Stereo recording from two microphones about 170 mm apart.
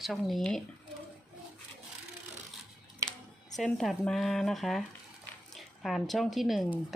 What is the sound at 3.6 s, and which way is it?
Speech, centre (ahead or behind).